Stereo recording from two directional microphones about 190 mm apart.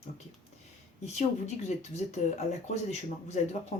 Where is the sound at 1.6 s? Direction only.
35° left (ahead or behind).